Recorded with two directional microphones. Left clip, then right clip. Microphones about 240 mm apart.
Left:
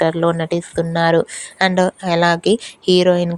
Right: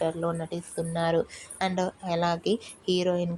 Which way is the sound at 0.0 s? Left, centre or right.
Left.